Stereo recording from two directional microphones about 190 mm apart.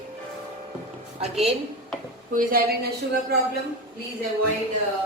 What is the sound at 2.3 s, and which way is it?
Speech, 45° right (ahead or behind).